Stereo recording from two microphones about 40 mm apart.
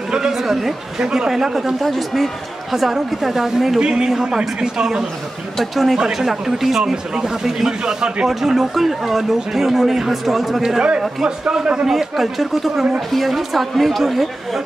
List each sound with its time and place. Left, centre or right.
0.1 s a sound: centre
0.9 s a woman's voice: centre
3.8 s a man's voice: centre
5.6 s a woman's voice: centre
7.8 s a man's voice: centre
8.3 s speech: centre
11.8 s a woman's voice: centre